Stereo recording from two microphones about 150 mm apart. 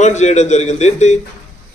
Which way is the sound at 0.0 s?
50° left (ahead or behind).